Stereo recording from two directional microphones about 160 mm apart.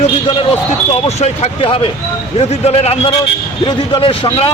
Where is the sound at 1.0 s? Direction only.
40° left (ahead or behind).